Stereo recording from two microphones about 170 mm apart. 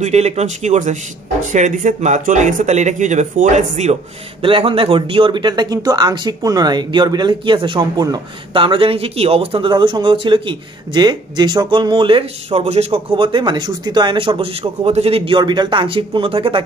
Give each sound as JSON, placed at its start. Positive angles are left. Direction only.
{"t": 0.0, "sound": "speech", "side_deg": -40}
{"t": 4.4, "sound": "speech", "side_deg": -30}